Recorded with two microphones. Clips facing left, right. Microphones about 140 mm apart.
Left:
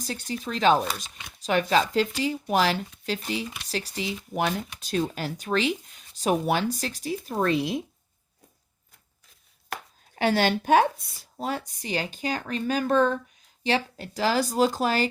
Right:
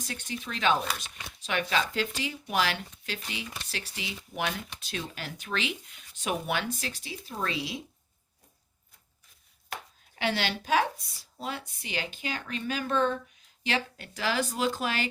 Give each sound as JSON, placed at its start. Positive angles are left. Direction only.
{"t": 0.0, "sound": "speech", "side_deg": 35}
{"t": 10.2, "sound": "speech", "side_deg": 45}